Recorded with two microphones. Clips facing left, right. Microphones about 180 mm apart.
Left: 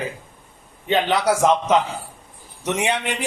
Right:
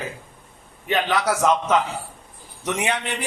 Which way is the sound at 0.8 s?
25° left (ahead or behind).